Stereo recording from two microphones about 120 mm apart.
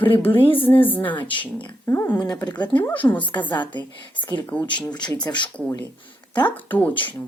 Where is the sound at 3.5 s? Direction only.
40° left (ahead or behind).